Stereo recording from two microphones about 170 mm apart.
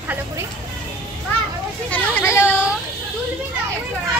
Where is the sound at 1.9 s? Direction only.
10° left (ahead or behind).